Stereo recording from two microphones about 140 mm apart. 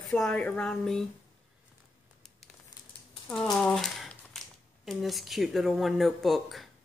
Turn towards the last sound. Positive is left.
turn(degrees=0)  # may be behind; listen again after turning